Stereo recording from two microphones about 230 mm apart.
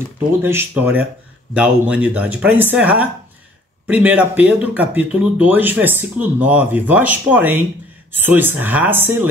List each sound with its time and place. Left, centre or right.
0.4 s speech: centre